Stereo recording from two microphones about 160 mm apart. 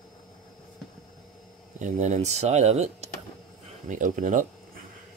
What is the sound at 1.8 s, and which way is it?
Speech, 50° right (ahead or behind).